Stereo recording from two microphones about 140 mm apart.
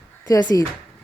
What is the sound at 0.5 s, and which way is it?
Speech, 25° left (ahead or behind).